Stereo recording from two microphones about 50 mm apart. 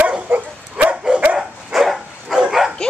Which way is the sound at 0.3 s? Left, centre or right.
Right.